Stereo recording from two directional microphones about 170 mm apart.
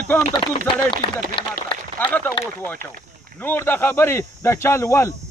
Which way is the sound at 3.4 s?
10° left (ahead or behind).